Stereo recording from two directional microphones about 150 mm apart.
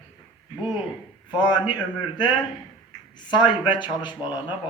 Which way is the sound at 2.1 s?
30° left (ahead or behind).